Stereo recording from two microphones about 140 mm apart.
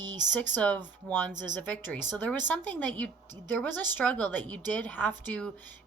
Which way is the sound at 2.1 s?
10° left (ahead or behind).